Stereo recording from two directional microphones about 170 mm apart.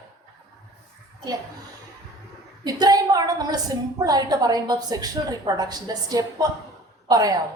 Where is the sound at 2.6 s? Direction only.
20° right (ahead or behind).